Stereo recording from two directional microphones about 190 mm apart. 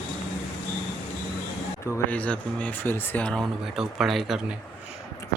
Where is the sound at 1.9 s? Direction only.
5° left (ahead or behind).